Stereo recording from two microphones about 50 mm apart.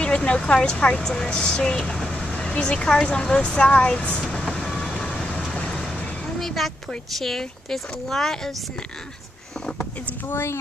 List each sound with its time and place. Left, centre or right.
0.0 s speech: left
1.0 s speech: centre
4.2 s vehicle: centre
7.1 s speech: centre
10.2 s a woman's voice: left